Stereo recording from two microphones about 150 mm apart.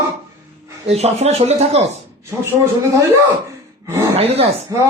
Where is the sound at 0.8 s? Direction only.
45° right (ahead or behind).